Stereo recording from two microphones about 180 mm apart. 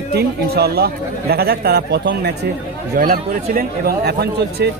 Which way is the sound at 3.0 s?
50° right (ahead or behind).